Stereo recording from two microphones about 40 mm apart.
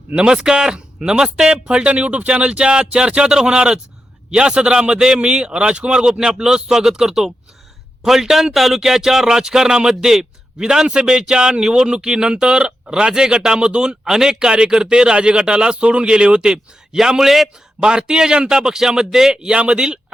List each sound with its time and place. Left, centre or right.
0.2 s a man's voice: right
17.7 s a man's voice: right